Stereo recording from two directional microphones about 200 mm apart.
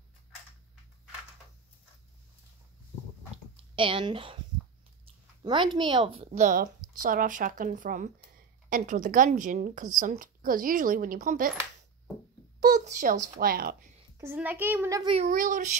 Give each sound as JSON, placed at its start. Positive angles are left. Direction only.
{"t": 3.7, "sound": "a woman's voice", "side_deg": -25}
{"t": 5.4, "sound": "a woman's voice", "side_deg": -25}
{"t": 12.6, "sound": "speech", "side_deg": -40}
{"t": 14.1, "sound": "a child's voice", "side_deg": -10}
{"t": 15.1, "sound": "speech", "side_deg": -40}